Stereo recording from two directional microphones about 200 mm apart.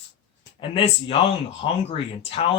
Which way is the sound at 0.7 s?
30° left (ahead or behind).